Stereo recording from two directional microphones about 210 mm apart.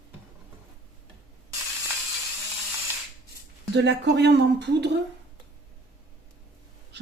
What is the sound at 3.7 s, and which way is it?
Speech, 55° right (ahead or behind).